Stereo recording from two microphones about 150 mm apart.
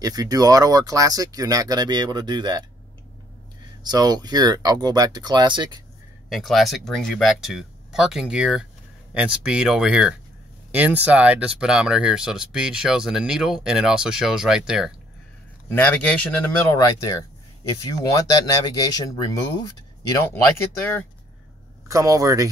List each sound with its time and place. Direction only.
0.0 s speech: 25° right (ahead or behind)
3.8 s speech: 25° right (ahead or behind)
6.2 s speech: centre (ahead or behind)
15.7 s speech: 10° left (ahead or behind)
16.7 s speech: 25° left (ahead or behind)
20.7 s speech: 15° left (ahead or behind)
21.8 s speech: 20° right (ahead or behind)